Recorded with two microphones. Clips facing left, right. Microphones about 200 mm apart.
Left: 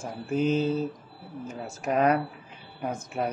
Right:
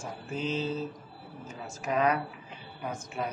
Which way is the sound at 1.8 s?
45° left (ahead or behind).